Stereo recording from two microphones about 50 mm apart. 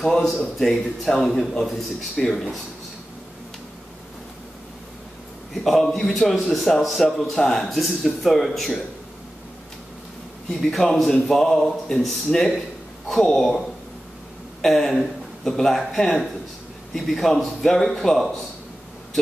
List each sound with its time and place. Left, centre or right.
0.1 s a man's voice: centre
5.5 s a man's voice: centre
10.5 s a man's voice: centre
13.2 s a man's voice: centre
14.6 s a man's voice: centre